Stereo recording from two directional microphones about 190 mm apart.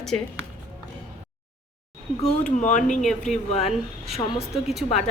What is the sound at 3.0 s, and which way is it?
Speech, centre (ahead or behind).